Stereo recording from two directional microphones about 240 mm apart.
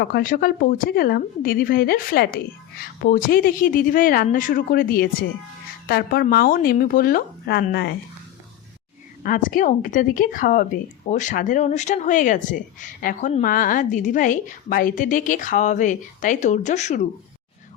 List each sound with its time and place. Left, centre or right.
0.0 s a woman's voice: left
9.2 s a woman's voice: left